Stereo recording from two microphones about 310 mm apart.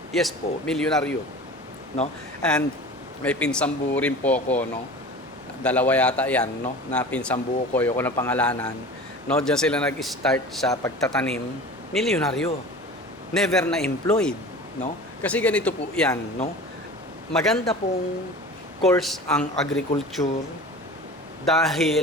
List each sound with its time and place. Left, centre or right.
0.1 s speech: centre
2.4 s speech: centre
5.6 s speech: centre
17.3 s speech: centre
18.8 s speech: centre
21.4 s speech: centre